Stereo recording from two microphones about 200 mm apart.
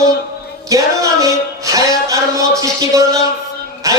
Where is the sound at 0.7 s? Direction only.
15° right (ahead or behind).